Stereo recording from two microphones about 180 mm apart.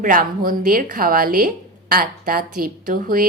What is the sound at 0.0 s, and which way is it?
Speech, 50° right (ahead or behind).